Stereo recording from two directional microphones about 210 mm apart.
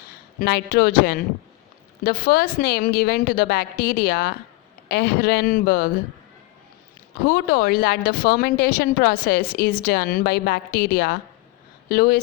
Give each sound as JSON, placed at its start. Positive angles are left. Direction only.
{"t": 0.3, "sound": "a woman's voice", "side_deg": 45}
{"t": 7.3, "sound": "a woman's voice", "side_deg": 45}